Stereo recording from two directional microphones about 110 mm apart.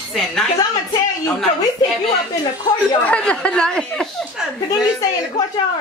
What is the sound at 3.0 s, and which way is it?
Speech, 10° left (ahead or behind).